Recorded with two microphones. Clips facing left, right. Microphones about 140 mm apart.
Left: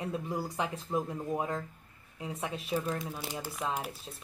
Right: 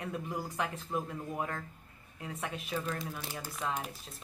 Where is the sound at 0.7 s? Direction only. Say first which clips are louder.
Left 3 dB; 30° left (ahead or behind).